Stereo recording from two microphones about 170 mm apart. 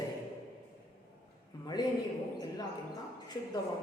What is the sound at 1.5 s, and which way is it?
Speech, 20° left (ahead or behind).